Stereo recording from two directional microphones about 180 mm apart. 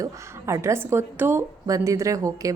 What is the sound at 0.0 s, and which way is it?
A woman's voice, 15° right (ahead or behind).